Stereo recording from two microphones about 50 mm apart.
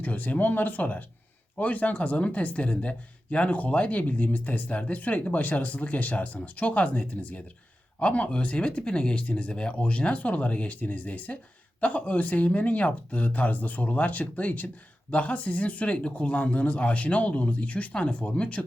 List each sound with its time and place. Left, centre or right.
0.0 s speech: left